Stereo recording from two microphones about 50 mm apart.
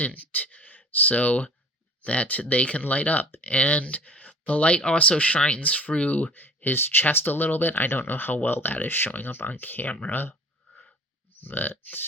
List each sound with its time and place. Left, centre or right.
0.0 s speech: left
6.3 s speech: left
11.3 s speech: left